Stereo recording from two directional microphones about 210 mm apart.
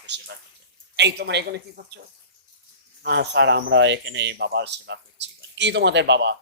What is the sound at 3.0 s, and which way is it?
A man's voice, 50° right (ahead or behind).